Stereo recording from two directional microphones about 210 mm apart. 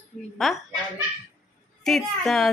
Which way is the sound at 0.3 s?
Centre (ahead or behind).